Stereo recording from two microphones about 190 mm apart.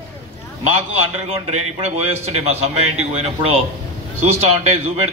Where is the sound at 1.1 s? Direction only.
35° right (ahead or behind).